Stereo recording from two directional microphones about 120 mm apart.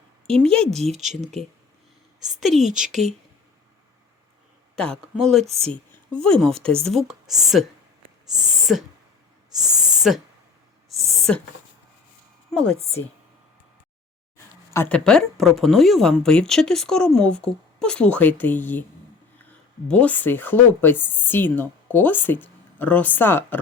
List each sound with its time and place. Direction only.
0.4 s speech: 5° left (ahead or behind)
4.7 s a woman's voice: 5° left (ahead or behind)
8.4 s a sound: 5° right (ahead or behind)
9.5 s speech: 5° right (ahead or behind)
9.9 s a sound: 5° right (ahead or behind)
11.3 s speech: 10° left (ahead or behind)
12.5 s a sound: 5° left (ahead or behind)
14.8 s speech: 10° left (ahead or behind)
19.9 s speech: 10° left (ahead or behind)